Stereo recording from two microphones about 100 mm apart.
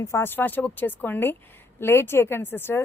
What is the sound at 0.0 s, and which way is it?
A woman's voice, 25° left (ahead or behind).